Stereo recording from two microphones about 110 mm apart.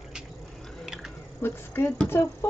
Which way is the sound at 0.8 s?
5° right (ahead or behind).